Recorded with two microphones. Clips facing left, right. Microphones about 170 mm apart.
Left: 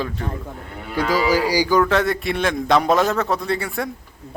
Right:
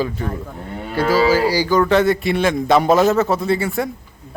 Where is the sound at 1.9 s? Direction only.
Centre (ahead or behind).